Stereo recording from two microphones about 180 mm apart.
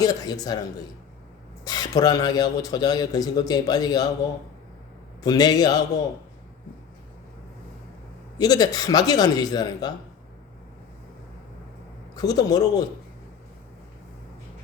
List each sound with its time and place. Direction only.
0.0 s a man's voice: 20° left (ahead or behind)
1.6 s a man's voice: 20° left (ahead or behind)
5.2 s a man's voice: 20° left (ahead or behind)
8.4 s a man's voice: 20° left (ahead or behind)
12.1 s a man's voice: 20° left (ahead or behind)